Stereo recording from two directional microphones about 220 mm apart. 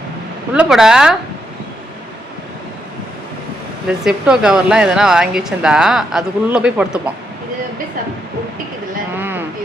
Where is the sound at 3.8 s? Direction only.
5° right (ahead or behind).